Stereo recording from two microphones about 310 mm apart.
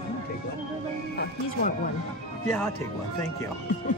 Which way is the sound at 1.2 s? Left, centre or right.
Left.